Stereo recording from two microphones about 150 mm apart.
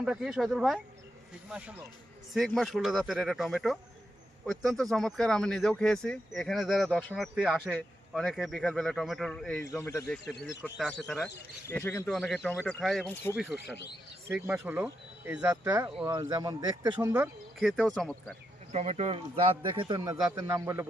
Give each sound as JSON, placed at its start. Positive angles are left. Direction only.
{"t": 0.0, "sound": "speech", "side_deg": -5}
{"t": 9.7, "sound": "speech", "side_deg": 20}
{"t": 10.1, "sound": "speech", "side_deg": 5}
{"t": 11.7, "sound": "a man's voice", "side_deg": 15}
{"t": 12.0, "sound": "speech", "side_deg": 5}
{"t": 14.6, "sound": "speech", "side_deg": -15}
{"t": 17.6, "sound": "speech", "side_deg": 0}
{"t": 18.7, "sound": "a man's voice", "side_deg": -45}